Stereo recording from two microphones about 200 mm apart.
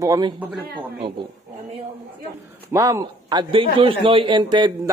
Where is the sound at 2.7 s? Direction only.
15° right (ahead or behind).